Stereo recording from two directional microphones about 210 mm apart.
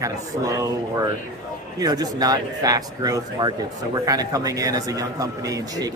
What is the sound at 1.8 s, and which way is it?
Speech, 20° right (ahead or behind).